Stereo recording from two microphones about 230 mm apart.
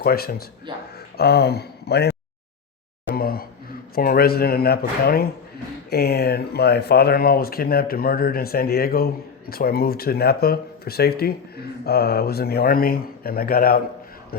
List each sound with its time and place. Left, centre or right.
0.0 s speech: left
3.2 s a sound: left
3.9 s speech: left